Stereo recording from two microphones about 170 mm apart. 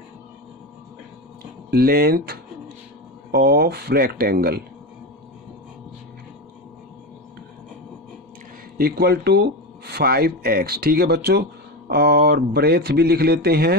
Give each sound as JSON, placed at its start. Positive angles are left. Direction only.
{"t": 1.7, "sound": "speech", "side_deg": -65}
{"t": 8.7, "sound": "speech", "side_deg": -70}